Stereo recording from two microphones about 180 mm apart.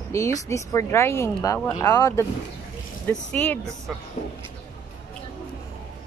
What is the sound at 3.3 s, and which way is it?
Speech, 10° left (ahead or behind).